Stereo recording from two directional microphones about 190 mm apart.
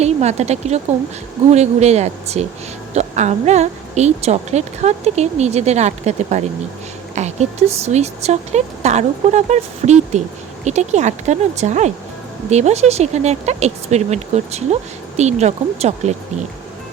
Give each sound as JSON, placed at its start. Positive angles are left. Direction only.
{"t": 0.0, "sound": "speech", "side_deg": -35}